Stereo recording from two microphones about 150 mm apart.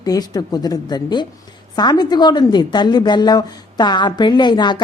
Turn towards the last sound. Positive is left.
turn(degrees=30)  # may be behind; listen again after turning